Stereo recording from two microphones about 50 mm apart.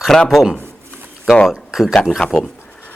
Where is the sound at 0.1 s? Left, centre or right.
Centre.